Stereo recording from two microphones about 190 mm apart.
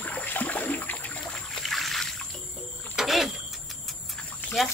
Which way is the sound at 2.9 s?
Centre (ahead or behind).